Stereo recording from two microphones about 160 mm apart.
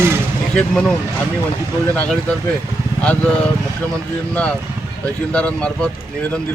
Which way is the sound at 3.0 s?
10° left (ahead or behind).